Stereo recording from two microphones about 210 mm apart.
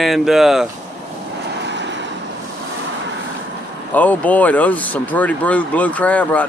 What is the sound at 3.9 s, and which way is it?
Speech, 5° left (ahead or behind).